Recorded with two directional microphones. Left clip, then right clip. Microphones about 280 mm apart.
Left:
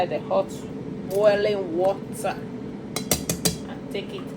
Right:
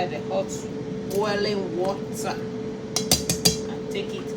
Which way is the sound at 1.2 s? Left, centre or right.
Centre.